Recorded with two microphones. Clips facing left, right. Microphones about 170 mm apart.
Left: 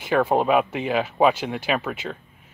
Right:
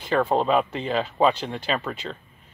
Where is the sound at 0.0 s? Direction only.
10° left (ahead or behind).